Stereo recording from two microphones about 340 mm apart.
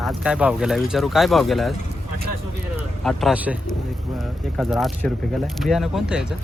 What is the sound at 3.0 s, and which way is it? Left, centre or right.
Speech, centre.